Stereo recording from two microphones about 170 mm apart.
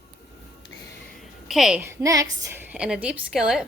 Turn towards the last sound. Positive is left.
turn(degrees=-5)  # may be behind; listen again after turning